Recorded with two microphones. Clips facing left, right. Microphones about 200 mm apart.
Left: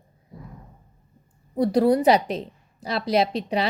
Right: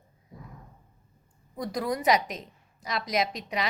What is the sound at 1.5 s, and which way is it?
A woman's voice, 30° left (ahead or behind).